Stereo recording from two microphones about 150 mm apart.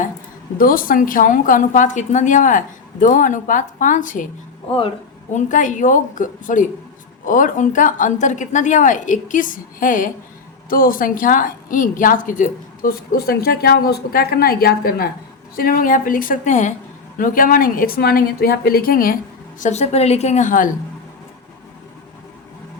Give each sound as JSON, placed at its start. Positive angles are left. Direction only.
{"t": 0.6, "sound": "a woman's voice", "side_deg": 70}
{"t": 4.7, "sound": "a woman's voice", "side_deg": 40}
{"t": 5.3, "sound": "a woman's voice", "side_deg": 60}
{"t": 15.5, "sound": "a woman's voice", "side_deg": 75}
{"t": 17.2, "sound": "a woman's voice", "side_deg": 65}
{"t": 19.5, "sound": "a woman's voice", "side_deg": 50}